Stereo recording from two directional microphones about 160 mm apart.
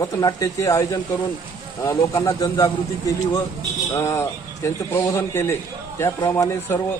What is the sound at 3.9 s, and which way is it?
A man's voice, 15° left (ahead or behind).